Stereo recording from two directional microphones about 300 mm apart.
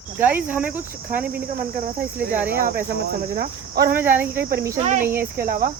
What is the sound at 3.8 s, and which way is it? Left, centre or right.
Speech, centre.